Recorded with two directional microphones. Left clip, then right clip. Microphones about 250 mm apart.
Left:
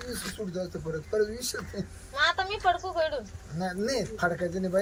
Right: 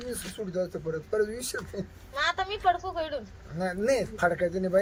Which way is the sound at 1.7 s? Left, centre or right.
Centre.